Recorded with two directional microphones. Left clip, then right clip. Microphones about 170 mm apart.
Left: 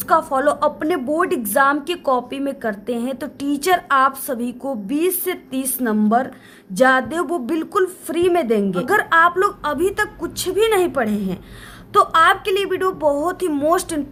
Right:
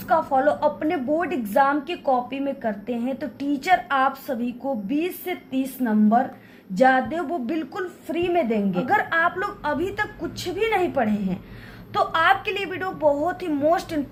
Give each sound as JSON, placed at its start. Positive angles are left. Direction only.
{"t": 0.1, "sound": "a woman's voice", "side_deg": 40}